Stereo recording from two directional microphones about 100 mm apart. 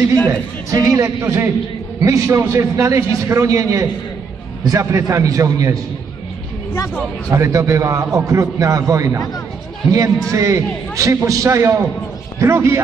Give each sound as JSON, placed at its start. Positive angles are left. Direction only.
{"t": 0.3, "sound": "a man's voice", "side_deg": -35}
{"t": 7.2, "sound": "a man's voice", "side_deg": -30}